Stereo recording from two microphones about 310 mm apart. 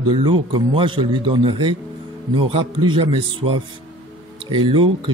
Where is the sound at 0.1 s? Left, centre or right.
Centre.